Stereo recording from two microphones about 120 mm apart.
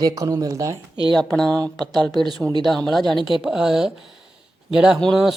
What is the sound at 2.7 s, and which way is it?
Mantra, centre (ahead or behind).